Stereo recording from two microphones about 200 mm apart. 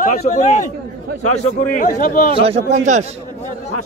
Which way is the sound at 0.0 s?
40° left (ahead or behind).